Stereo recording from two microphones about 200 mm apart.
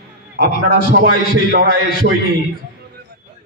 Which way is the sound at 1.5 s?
50° right (ahead or behind).